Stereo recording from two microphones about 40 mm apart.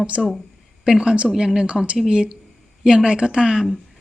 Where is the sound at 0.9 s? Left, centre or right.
Right.